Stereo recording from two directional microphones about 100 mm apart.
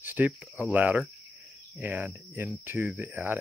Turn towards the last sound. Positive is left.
turn(degrees=-20)  # may be behind; listen again after turning